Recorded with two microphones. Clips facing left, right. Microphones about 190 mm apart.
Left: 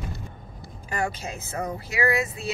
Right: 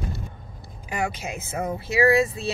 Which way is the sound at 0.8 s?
15° right (ahead or behind).